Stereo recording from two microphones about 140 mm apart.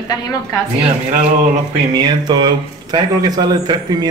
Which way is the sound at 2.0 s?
30° right (ahead or behind).